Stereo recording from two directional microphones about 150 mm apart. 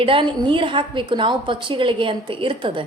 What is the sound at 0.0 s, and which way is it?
A woman's voice, 35° right (ahead or behind).